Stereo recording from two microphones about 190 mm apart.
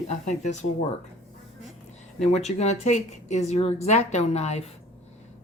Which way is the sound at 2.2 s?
35° left (ahead or behind).